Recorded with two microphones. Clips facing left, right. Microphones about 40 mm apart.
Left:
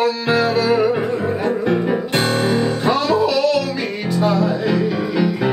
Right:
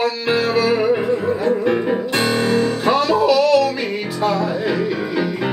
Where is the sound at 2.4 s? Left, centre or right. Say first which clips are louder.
Right 1 dB; left.